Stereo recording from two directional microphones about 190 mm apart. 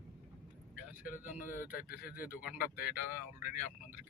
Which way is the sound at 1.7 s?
50° left (ahead or behind).